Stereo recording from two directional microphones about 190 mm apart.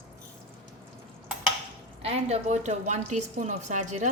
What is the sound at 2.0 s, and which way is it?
A woman's voice, 35° right (ahead or behind).